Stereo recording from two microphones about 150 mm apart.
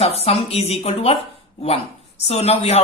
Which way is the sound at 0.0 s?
40° left (ahead or behind).